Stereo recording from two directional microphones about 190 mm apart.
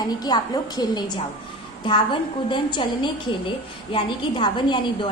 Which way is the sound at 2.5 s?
25° left (ahead or behind).